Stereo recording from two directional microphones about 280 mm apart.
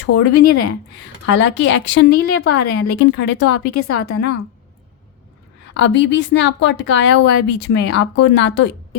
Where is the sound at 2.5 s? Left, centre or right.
Left.